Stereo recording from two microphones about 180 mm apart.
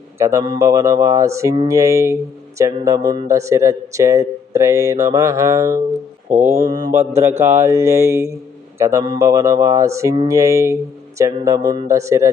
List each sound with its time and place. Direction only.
0.2 s speech: 15° right (ahead or behind)
6.3 s mantra: 40° right (ahead or behind)
6.7 s mantra: 25° right (ahead or behind)
7.2 s speech: 15° right (ahead or behind)